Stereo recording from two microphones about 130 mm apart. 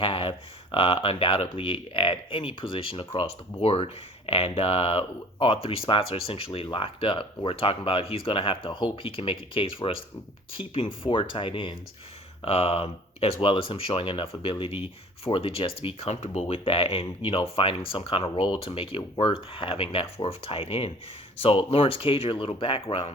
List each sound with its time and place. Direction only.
0.0 s speech: 45° left (ahead or behind)